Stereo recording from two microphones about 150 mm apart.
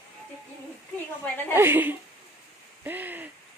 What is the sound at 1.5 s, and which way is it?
Speech, 15° right (ahead or behind).